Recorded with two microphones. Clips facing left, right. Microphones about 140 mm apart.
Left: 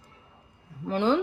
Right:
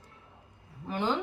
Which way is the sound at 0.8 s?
90° left.